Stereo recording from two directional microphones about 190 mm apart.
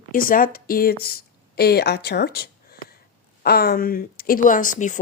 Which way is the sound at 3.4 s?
55° left (ahead or behind).